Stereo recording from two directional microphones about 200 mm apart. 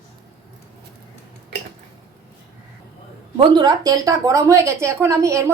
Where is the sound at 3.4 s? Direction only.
20° right (ahead or behind).